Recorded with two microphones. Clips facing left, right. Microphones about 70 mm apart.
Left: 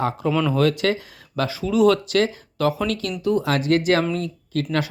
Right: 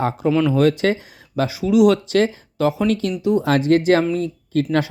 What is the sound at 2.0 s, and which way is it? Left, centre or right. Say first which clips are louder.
Speech: right 3 dB; right.